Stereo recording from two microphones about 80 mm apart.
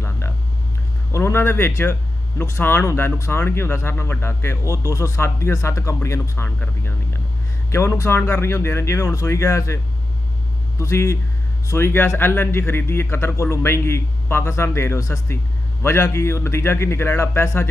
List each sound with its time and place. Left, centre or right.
1.1 s speech: left
10.8 s speech: left